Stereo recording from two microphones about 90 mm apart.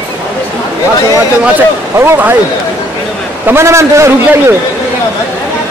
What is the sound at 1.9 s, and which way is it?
Speech, 30° right (ahead or behind).